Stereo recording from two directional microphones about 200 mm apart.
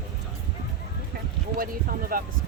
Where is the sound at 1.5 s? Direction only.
45° right (ahead or behind).